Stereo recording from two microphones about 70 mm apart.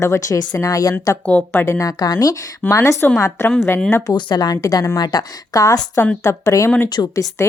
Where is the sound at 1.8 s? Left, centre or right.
Left.